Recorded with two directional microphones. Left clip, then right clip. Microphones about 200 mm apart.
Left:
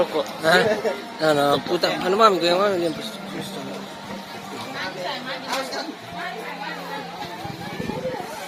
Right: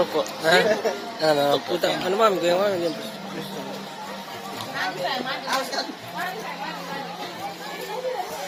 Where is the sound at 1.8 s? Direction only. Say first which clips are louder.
Left 4 dB; 45° left (ahead or behind).